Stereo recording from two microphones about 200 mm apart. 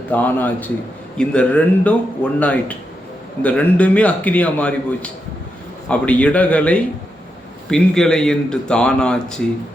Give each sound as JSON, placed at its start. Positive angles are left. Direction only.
{"t": 0.1, "sound": "a man's voice", "side_deg": 10}